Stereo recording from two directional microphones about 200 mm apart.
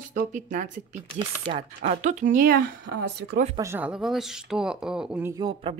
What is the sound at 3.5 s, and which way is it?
Speech, 10° right (ahead or behind).